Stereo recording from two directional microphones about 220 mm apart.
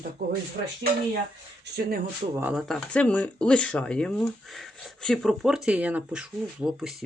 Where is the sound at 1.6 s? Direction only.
45° right (ahead or behind).